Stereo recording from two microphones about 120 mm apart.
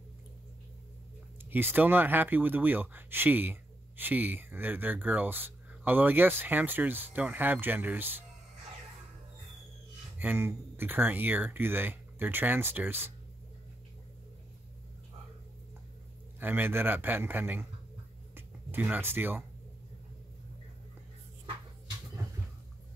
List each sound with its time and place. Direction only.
1.5 s speech: 15° right (ahead or behind)
10.1 s speech: 15° right (ahead or behind)
16.3 s speech: 15° right (ahead or behind)
18.3 s a sound: 15° right (ahead or behind)